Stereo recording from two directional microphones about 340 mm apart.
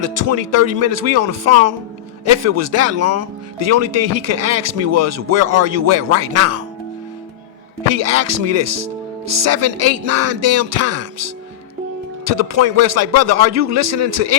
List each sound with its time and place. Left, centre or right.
0.0 s speech: right
7.9 s speech: right